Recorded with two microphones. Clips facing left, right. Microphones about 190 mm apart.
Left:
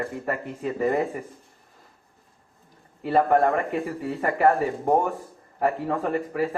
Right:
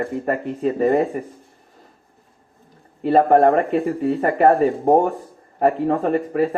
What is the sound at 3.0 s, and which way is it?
Speech, 35° right (ahead or behind).